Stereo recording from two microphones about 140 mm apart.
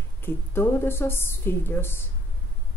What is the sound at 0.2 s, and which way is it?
A woman's voice, 15° left (ahead or behind).